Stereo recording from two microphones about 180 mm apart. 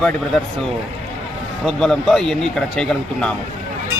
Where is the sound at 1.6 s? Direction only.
Centre (ahead or behind).